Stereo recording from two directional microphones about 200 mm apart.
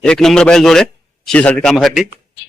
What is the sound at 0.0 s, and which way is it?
A man's voice, 5° left (ahead or behind).